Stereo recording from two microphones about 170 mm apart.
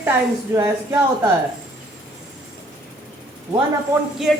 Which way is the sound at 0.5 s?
15° right (ahead or behind).